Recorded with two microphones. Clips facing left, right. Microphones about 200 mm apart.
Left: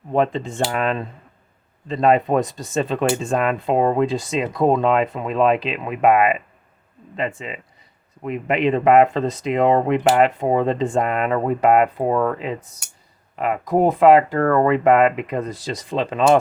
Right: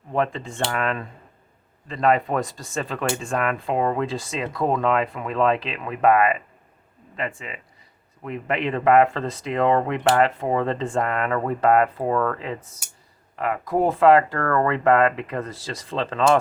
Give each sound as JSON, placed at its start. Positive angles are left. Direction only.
{"t": 0.1, "sound": "speech", "side_deg": 20}